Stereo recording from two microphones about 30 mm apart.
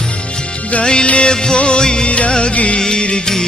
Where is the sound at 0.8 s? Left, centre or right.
Left.